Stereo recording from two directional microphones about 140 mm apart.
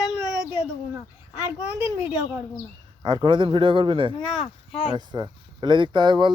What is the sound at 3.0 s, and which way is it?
Speech, 30° right (ahead or behind).